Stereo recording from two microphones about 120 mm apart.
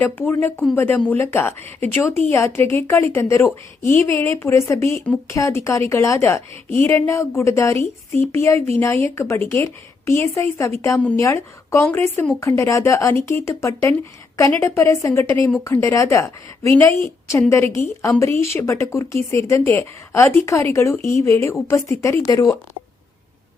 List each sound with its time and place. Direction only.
0.0 s speech: 20° left (ahead or behind)
1.6 s speech: 65° right (ahead or behind)
2.0 s speech: 20° left (ahead or behind)